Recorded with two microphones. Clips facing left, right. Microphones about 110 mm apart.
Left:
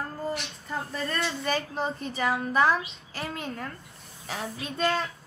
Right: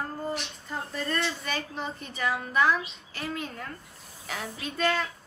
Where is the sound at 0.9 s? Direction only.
30° left (ahead or behind).